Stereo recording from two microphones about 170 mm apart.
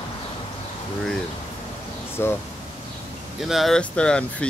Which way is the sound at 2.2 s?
15° left (ahead or behind).